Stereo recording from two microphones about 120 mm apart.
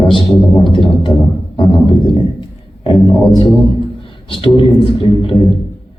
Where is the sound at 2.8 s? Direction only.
40° left (ahead or behind).